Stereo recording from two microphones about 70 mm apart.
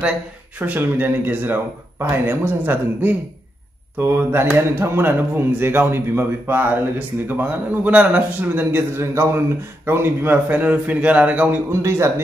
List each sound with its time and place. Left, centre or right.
0.6 s a man's voice: right
11.8 s a man's voice: right